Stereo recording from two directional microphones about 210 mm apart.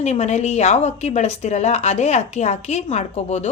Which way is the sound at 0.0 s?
30° left (ahead or behind).